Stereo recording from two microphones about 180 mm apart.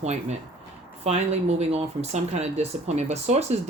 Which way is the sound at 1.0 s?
35° right (ahead or behind).